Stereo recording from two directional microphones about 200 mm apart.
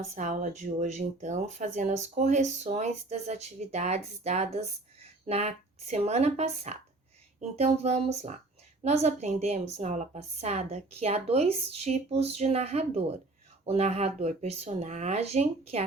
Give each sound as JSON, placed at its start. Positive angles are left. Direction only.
{"t": 0.0, "sound": "speech", "side_deg": -35}